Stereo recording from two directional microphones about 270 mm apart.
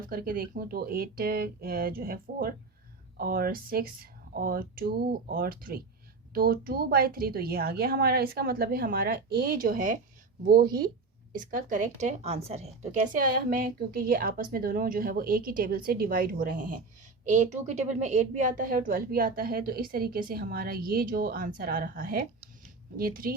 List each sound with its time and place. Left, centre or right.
0.1 s a woman's voice: right